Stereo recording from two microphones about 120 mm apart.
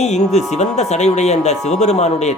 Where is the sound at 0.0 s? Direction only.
70° left (ahead or behind).